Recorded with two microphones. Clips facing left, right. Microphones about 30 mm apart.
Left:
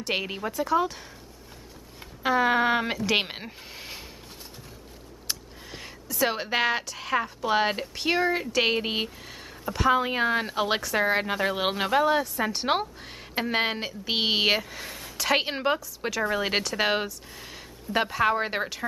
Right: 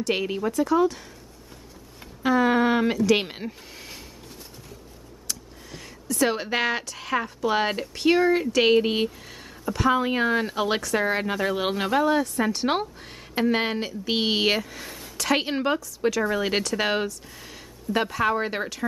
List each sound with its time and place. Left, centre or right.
0.0 s a woman's voice: centre
2.2 s a woman's voice: centre
5.3 s a sound: left
6.0 s a woman's voice: centre